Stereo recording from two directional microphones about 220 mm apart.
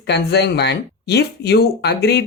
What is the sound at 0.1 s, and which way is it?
Speech, 50° left (ahead or behind).